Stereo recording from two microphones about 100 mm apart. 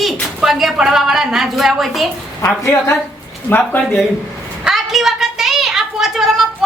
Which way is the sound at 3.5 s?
25° left (ahead or behind).